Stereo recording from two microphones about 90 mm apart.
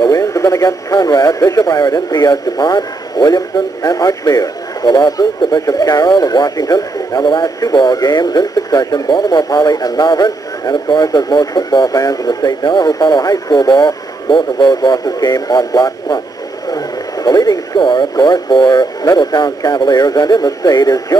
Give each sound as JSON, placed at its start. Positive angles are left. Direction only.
{"t": 0.1, "sound": "speech", "side_deg": 35}
{"t": 16.7, "sound": "radio", "side_deg": 45}
{"t": 17.7, "sound": "speech", "side_deg": 60}